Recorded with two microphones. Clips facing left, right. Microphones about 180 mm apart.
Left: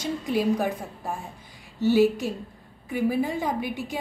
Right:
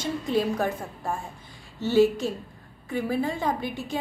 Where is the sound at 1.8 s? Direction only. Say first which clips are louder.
Left 1 dB; 10° left (ahead or behind).